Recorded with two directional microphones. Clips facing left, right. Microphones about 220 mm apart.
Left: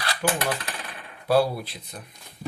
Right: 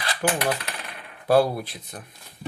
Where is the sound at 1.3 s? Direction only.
50° right (ahead or behind).